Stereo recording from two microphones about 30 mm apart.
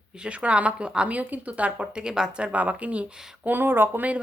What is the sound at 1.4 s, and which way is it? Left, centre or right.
Speech, right.